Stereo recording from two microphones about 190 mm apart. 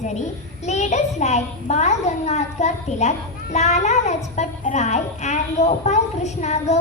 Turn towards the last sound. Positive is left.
turn(degrees=35)  # may be behind; listen again after turning